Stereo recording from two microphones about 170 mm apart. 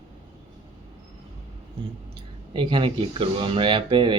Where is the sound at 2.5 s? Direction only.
30° right (ahead or behind).